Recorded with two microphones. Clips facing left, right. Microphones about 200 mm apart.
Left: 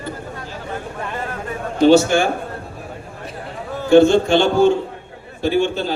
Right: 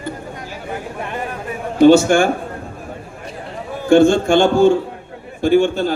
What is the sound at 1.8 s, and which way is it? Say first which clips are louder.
Speech: right 3 dB; 50° right (ahead or behind).